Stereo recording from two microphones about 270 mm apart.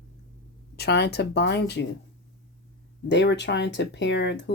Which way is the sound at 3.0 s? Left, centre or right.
Left.